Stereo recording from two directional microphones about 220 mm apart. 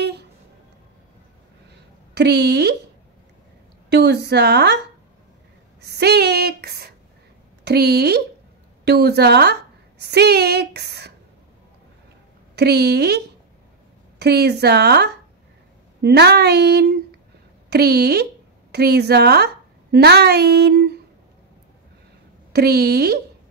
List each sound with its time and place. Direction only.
2.1 s speech: 50° right (ahead or behind)
3.9 s speech: 50° right (ahead or behind)
5.8 s a woman's voice: 50° right (ahead or behind)
12.5 s a woman's voice: 50° right (ahead or behind)
22.5 s speech: 45° right (ahead or behind)